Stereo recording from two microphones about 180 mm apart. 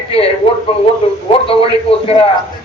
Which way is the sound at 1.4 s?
30° left (ahead or behind).